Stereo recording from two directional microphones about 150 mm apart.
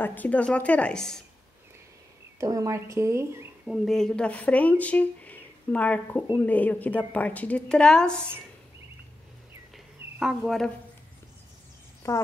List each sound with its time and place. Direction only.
0.0 s a woman's voice: 10° left (ahead or behind)
2.4 s speech: 20° right (ahead or behind)
3.6 s a woman's voice: centre (ahead or behind)
10.1 s speech: centre (ahead or behind)
12.0 s speech: 20° left (ahead or behind)